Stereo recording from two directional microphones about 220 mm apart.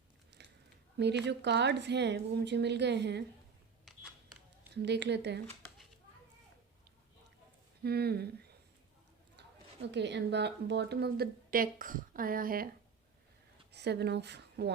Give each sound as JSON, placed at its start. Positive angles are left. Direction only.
{"t": 0.3, "sound": "a sound", "side_deg": -50}
{"t": 0.9, "sound": "a woman's voice", "side_deg": -50}
{"t": 4.7, "sound": "a woman's voice", "side_deg": -50}
{"t": 7.9, "sound": "a woman's voice", "side_deg": -45}
{"t": 9.8, "sound": "a woman's voice", "side_deg": -50}
{"t": 13.7, "sound": "speech", "side_deg": -50}